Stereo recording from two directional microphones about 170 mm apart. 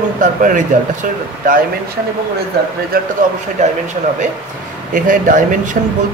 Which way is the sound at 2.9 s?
60° right (ahead or behind).